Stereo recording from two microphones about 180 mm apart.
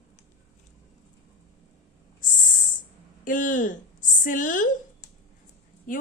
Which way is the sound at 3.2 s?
45° left (ahead or behind).